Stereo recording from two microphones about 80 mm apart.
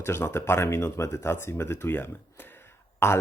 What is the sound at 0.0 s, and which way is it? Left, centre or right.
Speech, left.